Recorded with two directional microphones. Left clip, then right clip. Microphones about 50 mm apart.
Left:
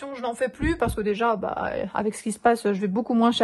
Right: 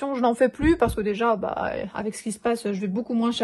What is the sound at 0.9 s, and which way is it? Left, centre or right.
Speech, left.